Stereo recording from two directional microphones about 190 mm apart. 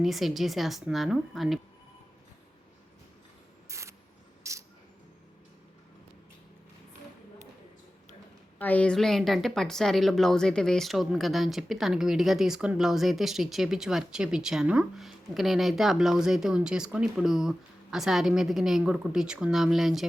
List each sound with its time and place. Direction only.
0.0 s a woman's voice: centre (ahead or behind)
3.7 s a sound: 15° right (ahead or behind)
4.4 s cricket: 15° right (ahead or behind)
8.5 s a woman's voice: 10° left (ahead or behind)